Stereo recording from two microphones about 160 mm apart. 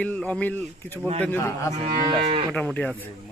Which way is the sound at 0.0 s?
10° left (ahead or behind).